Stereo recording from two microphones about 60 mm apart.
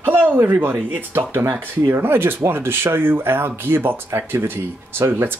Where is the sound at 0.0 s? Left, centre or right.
Right.